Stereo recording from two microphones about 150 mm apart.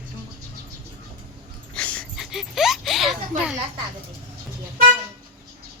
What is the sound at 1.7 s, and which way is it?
Dog, 10° left (ahead or behind).